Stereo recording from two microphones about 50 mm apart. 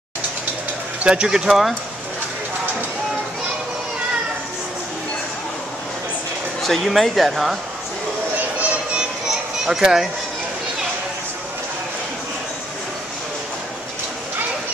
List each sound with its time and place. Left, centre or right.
1.0 s speech: centre
1.5 s speech: centre
6.6 s speech: centre
8.9 s children playing: centre